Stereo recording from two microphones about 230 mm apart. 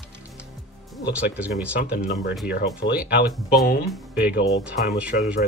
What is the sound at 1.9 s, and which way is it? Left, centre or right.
Speech, left.